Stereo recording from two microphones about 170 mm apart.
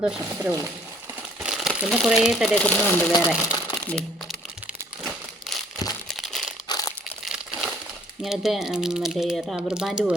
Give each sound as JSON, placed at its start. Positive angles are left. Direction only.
{"t": 0.0, "sound": "speech", "side_deg": -5}
{"t": 3.4, "sound": "crumpling", "side_deg": 10}
{"t": 6.7, "sound": "crumpling", "side_deg": 20}
{"t": 7.3, "sound": "crumpling", "side_deg": -5}
{"t": 8.2, "sound": "speech", "side_deg": 0}